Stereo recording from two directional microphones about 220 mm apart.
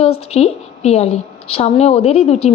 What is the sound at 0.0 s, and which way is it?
A woman's voice, 30° left (ahead or behind).